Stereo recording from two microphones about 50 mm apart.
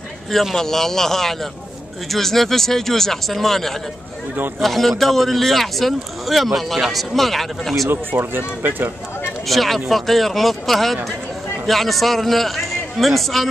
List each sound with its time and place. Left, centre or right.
0.3 s a man's voice: centre
7.9 s speech: right
9.5 s a man's voice: centre